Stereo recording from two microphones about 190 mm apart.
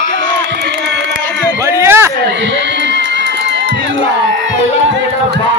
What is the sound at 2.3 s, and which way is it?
Music, 70° right (ahead or behind).